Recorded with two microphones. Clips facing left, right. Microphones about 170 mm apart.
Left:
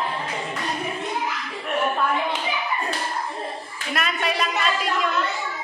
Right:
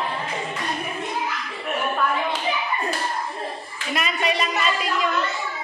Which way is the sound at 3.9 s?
Centre (ahead or behind).